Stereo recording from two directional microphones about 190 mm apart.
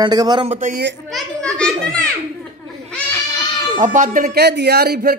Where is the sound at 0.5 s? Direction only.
40° right (ahead or behind).